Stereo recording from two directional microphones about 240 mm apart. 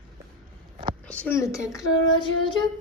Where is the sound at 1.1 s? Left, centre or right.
Centre.